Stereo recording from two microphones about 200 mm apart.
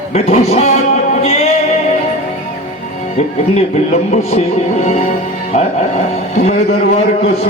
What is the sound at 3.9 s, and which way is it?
Speech, 35° left (ahead or behind).